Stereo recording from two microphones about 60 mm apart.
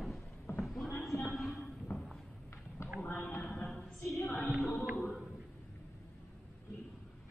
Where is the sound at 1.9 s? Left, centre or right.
Left.